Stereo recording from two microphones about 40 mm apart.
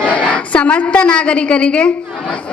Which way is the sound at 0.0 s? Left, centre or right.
Left.